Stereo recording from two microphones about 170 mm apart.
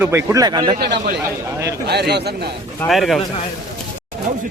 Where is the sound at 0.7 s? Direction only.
70° right (ahead or behind).